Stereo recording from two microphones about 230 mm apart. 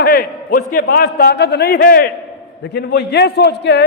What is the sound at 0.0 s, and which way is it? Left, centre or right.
A man's voice, left.